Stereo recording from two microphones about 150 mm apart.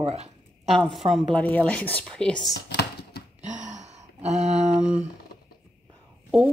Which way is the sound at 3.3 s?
50° right (ahead or behind).